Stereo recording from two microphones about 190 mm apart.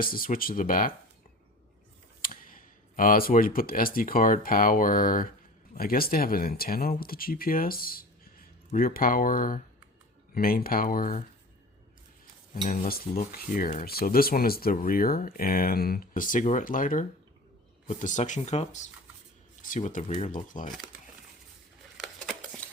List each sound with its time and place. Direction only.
0.0 s cutlery: 50° left (ahead or behind)
2.2 s speech: 45° left (ahead or behind)
5.7 s cutlery: 50° left (ahead or behind)
12.6 s cutlery: 45° left (ahead or behind)
17.8 s speech: 40° left (ahead or behind)
19.6 s cutlery: 45° left (ahead or behind)